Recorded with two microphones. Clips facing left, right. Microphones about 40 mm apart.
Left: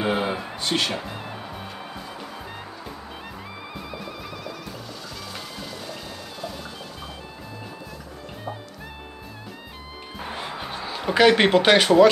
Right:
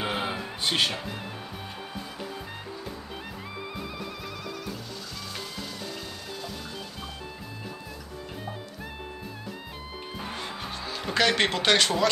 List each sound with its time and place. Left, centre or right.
0.0 s a sound: centre
0.7 s speech: centre
3.7 s music: centre
10.1 s music: centre